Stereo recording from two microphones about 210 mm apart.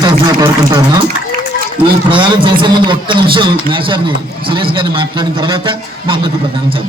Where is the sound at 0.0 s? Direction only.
20° right (ahead or behind).